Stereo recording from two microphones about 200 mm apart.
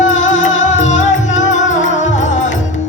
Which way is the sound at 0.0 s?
70° left (ahead or behind).